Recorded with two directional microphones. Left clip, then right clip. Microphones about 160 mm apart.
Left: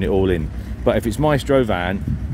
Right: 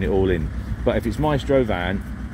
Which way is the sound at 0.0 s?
20° left (ahead or behind).